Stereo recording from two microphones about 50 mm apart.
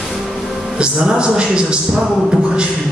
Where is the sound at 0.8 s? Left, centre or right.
Centre.